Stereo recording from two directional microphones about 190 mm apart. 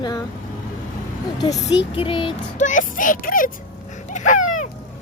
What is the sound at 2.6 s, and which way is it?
Speech, 45° left (ahead or behind).